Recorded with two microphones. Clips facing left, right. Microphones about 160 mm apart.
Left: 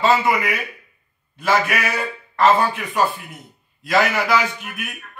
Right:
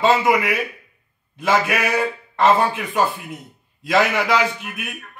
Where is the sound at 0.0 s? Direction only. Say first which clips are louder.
Right 1 dB; 20° right (ahead or behind).